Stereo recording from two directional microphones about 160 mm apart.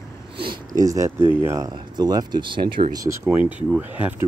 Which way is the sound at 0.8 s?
20° right (ahead or behind).